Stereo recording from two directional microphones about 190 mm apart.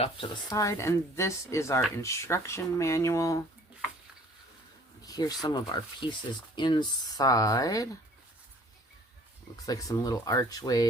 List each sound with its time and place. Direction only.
0.5 s speech: 15° left (ahead or behind)
5.0 s speech: 20° left (ahead or behind)
9.6 s speech: 20° left (ahead or behind)